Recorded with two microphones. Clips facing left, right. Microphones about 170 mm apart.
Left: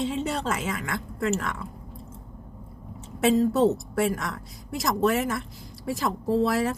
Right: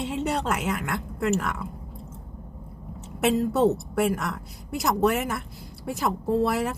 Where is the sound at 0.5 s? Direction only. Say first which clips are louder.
Right 2 dB; 65° right (ahead or behind).